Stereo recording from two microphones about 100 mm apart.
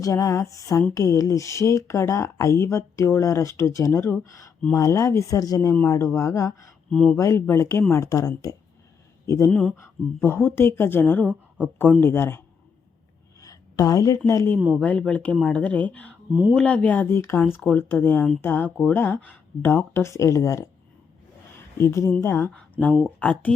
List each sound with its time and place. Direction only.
0.0 s a woman's voice: 30° left (ahead or behind)
6.9 s speech: 10° left (ahead or behind)
7.2 s a woman's voice: 25° left (ahead or behind)
9.5 s speech: 10° left (ahead or behind)
9.7 s a woman's voice: 25° left (ahead or behind)
13.4 s a sound: 35° left (ahead or behind)
14.3 s speech: 30° left (ahead or behind)
14.8 s a woman's voice: 15° left (ahead or behind); by 20.7 s 30° left (ahead or behind)
21.8 s a woman's voice: 25° left (ahead or behind); by 23.6 s 10° left (ahead or behind)